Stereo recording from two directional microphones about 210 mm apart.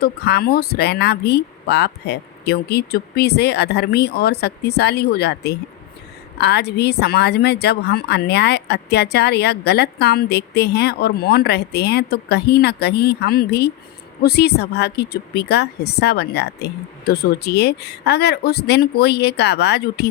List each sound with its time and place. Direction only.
0.0 s a woman's voice: 50° left (ahead or behind)